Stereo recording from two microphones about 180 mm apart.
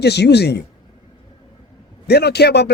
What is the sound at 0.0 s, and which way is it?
Speech, 65° left (ahead or behind).